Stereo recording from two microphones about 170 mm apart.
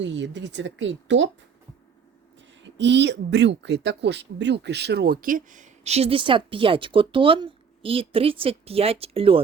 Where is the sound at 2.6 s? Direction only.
90° right; by 9.4 s 35° right (ahead or behind).